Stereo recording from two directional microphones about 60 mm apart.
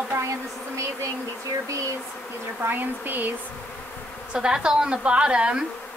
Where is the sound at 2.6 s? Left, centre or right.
Right.